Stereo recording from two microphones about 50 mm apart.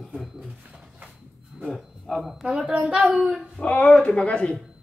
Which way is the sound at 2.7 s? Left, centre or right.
Centre.